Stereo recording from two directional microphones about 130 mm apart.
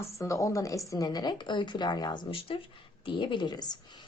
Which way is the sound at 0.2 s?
25° left (ahead or behind).